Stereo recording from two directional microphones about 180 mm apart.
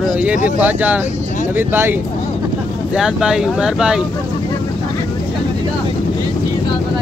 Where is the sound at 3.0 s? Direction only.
5° right (ahead or behind).